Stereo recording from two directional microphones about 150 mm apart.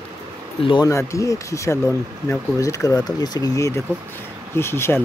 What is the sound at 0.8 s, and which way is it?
Speech, 20° left (ahead or behind).